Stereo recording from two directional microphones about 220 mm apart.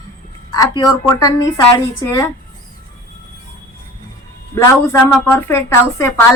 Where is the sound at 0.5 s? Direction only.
15° left (ahead or behind).